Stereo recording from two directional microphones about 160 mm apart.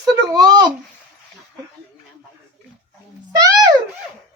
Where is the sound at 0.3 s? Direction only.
25° right (ahead or behind).